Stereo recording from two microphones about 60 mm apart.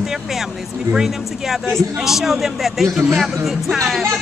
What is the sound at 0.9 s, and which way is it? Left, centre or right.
Speech, centre.